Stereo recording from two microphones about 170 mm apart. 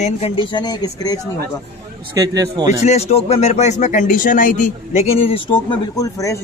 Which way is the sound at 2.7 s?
40° left (ahead or behind).